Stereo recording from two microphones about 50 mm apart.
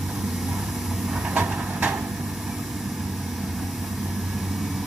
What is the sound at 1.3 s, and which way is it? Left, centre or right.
Vehicle, right.